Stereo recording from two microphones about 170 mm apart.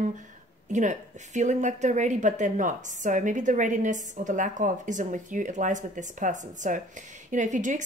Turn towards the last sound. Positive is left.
turn(degrees=-45)  # may be behind; listen again after turning